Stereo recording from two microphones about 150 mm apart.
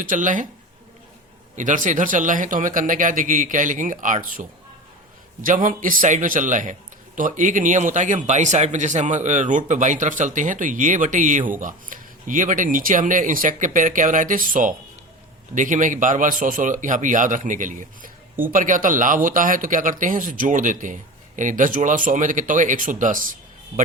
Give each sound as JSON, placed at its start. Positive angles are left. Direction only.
{"t": 0.0, "sound": "speech", "side_deg": -60}
{"t": 1.5, "sound": "speech", "side_deg": -55}
{"t": 5.4, "sound": "speech", "side_deg": -60}